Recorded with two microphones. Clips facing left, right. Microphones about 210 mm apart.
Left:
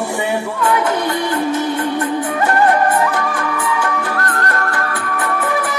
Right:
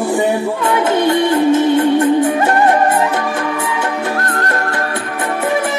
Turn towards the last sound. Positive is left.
turn(degrees=-25)  # may be behind; listen again after turning